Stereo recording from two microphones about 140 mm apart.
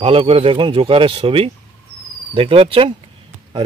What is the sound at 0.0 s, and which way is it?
Speech, 40° right (ahead or behind).